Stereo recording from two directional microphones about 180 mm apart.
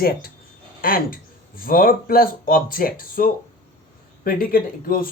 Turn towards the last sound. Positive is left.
turn(degrees=55)  # may be behind; listen again after turning